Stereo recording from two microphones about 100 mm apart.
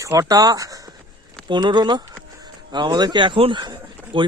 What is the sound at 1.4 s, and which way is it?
Speech, 50° right (ahead or behind).